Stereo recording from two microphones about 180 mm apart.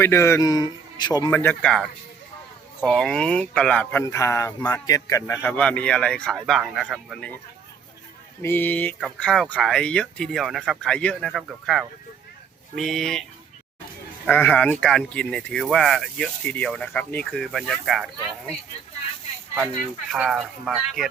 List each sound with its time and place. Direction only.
0.0 s a man's voice: 15° left (ahead or behind)
1.3 s a man's voice: 10° left (ahead or behind)
2.8 s a man's voice: 5° left (ahead or behind)
8.4 s a man's voice: 10° left (ahead or behind)
14.3 s speech: 10° left (ahead or behind)
20.1 s speech: centre (ahead or behind)